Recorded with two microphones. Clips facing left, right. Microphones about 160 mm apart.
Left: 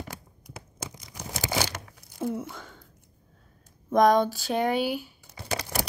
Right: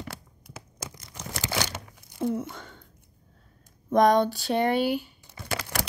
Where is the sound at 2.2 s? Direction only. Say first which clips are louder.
Right 2 dB; 5° left (ahead or behind).